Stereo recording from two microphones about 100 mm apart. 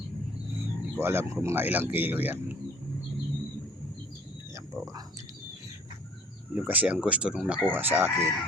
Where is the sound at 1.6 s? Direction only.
20° right (ahead or behind).